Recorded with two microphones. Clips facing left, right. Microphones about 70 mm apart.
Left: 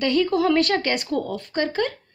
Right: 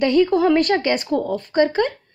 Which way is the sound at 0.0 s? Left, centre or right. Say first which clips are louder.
Right 4 dB; right.